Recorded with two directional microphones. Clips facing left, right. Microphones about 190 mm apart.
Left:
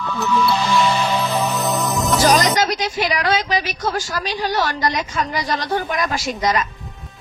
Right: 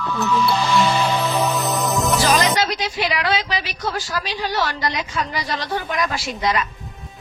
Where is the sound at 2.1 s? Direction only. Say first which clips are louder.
Left 4 dB; 45° left (ahead or behind).